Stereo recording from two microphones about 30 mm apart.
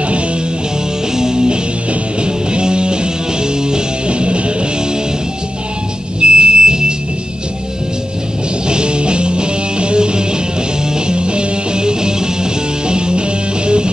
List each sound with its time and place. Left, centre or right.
1.1 s music: right
4.1 s music: right
6.2 s music: right
8.6 s music: right